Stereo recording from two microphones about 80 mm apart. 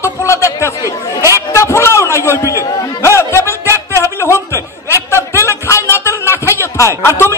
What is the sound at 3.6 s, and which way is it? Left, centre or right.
Music, right.